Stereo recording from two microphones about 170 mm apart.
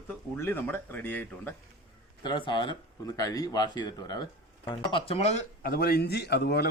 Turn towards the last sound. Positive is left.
turn(degrees=75)  # may be behind; listen again after turning